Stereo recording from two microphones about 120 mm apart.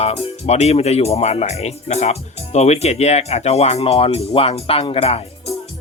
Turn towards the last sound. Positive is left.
turn(degrees=55)  # may be behind; listen again after turning